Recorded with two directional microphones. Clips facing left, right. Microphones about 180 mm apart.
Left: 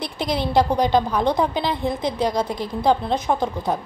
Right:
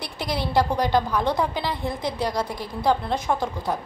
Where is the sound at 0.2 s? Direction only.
20° left (ahead or behind).